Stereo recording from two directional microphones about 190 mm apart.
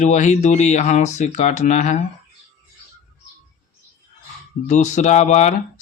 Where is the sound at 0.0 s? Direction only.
40° left (ahead or behind).